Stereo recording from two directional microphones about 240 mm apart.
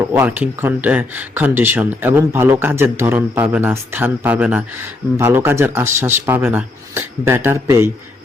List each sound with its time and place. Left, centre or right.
0.1 s speech: centre